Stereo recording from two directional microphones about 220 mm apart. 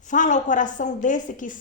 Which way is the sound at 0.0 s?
35° left (ahead or behind).